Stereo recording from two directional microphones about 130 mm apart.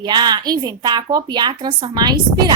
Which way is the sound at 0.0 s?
35° right (ahead or behind).